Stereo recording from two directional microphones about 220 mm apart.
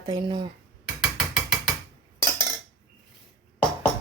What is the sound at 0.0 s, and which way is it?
Speech, 20° right (ahead or behind).